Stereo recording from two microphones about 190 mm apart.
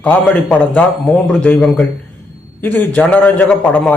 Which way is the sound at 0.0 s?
5° left (ahead or behind).